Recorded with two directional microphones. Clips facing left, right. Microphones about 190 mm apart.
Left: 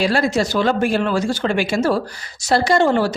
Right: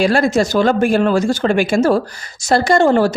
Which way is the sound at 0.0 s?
50° right (ahead or behind).